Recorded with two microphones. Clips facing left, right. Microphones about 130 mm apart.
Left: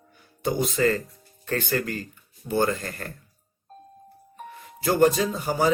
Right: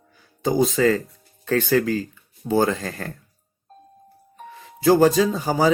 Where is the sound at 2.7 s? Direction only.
90° right.